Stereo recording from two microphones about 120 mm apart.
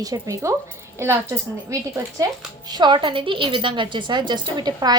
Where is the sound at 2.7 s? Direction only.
40° right (ahead or behind).